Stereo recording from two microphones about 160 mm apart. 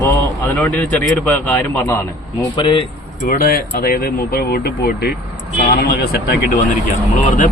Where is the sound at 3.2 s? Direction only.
65° left (ahead or behind).